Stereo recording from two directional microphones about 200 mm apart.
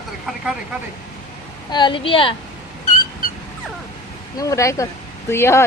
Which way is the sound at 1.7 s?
25° left (ahead or behind).